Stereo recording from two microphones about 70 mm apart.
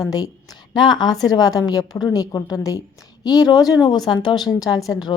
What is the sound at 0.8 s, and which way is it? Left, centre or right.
Speech, left.